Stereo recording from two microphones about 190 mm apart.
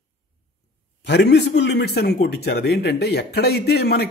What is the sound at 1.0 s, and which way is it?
A man's voice, 65° left (ahead or behind).